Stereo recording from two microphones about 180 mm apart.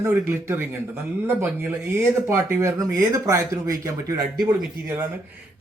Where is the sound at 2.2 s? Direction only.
15° right (ahead or behind).